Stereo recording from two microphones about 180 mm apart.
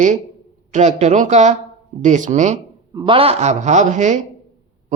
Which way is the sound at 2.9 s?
25° right (ahead or behind).